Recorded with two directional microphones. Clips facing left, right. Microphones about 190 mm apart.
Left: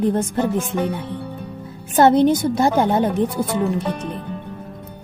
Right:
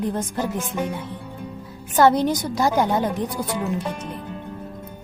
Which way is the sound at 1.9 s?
25° left (ahead or behind).